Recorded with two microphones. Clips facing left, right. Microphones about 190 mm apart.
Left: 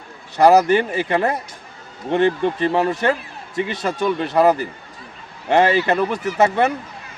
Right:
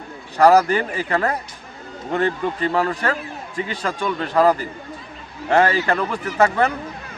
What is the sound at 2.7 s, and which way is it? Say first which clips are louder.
Speech: left 3 dB; 25° left (ahead or behind).